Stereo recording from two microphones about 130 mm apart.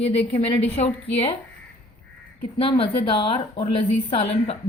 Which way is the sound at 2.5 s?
45° left (ahead or behind).